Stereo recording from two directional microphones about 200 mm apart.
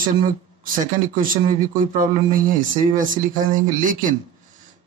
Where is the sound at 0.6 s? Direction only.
45° right (ahead or behind).